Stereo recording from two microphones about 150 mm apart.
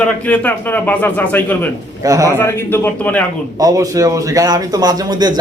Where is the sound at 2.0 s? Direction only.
20° right (ahead or behind).